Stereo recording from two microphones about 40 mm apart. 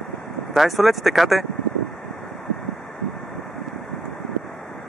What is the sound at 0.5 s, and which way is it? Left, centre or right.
Speech, centre.